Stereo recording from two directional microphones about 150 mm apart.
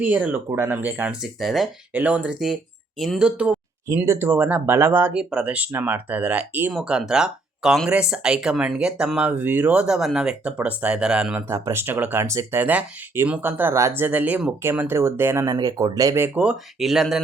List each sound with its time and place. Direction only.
0.0 s speech: 10° right (ahead or behind)
1.9 s speech: 10° right (ahead or behind)